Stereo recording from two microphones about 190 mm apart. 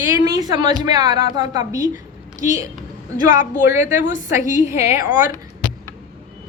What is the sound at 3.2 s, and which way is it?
A woman's voice, 20° right (ahead or behind).